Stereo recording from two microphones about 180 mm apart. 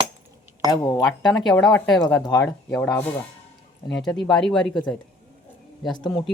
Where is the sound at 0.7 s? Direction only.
20° left (ahead or behind).